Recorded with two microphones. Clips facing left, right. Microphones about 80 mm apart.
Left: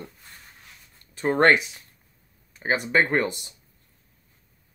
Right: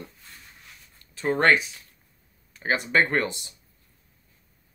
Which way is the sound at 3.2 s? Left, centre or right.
Left.